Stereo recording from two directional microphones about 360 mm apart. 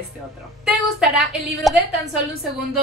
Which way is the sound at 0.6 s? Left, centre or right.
Centre.